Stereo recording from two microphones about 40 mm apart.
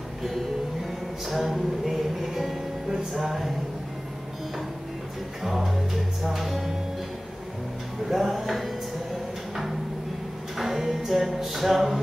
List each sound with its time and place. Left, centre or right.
1.2 s music: centre
5.4 s music: centre
8.1 s music: centre
10.6 s music: centre